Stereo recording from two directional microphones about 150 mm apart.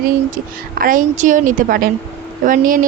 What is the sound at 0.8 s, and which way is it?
A woman's voice, 65° right (ahead or behind).